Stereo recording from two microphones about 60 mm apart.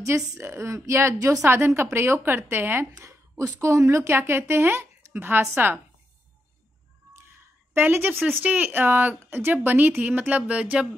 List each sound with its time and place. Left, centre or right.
0.4 s speech: right
1.2 s a woman's voice: right
1.8 s a woman's voice: right
3.0 s a sound: right
3.6 s a woman's voice: right
7.7 s a woman's voice: right